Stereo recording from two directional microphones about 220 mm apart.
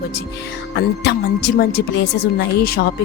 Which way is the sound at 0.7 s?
50° left (ahead or behind).